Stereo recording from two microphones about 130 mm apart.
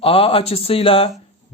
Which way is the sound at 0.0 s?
45° left (ahead or behind).